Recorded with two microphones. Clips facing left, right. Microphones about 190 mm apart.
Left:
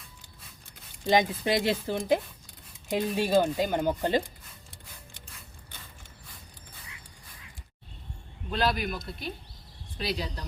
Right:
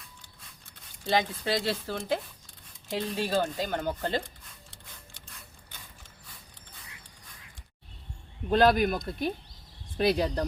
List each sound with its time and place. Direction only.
1.0 s speech: 15° left (ahead or behind)
8.4 s a man's voice: 50° right (ahead or behind)
10.0 s a man's voice: 55° right (ahead or behind)